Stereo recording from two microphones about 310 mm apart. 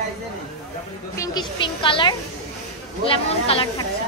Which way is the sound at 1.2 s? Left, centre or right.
Centre.